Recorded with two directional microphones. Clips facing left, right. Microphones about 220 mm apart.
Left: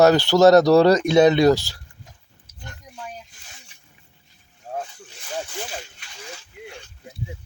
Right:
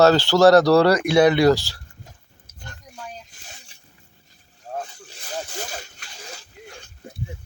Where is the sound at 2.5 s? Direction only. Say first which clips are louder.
Left 1 dB; 50° right (ahead or behind).